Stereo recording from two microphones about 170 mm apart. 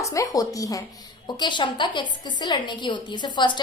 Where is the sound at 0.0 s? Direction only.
20° left (ahead or behind).